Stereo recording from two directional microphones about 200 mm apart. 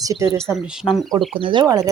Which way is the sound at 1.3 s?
25° right (ahead or behind).